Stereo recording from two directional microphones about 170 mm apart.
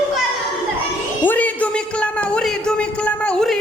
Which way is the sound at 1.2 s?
10° left (ahead or behind).